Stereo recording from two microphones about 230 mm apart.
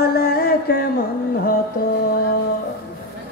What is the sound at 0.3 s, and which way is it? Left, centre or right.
Mantra, left.